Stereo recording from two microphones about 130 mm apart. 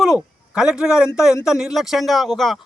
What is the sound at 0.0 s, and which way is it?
Speech, 5° right (ahead or behind).